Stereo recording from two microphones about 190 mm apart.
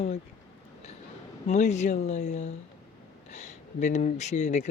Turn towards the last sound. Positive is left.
turn(degrees=40)  # may be behind; listen again after turning